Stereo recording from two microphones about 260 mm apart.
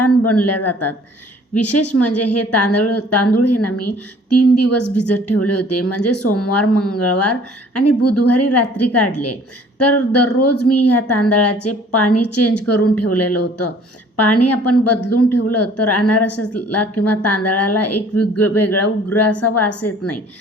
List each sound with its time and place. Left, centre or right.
0.0 s a woman's voice: left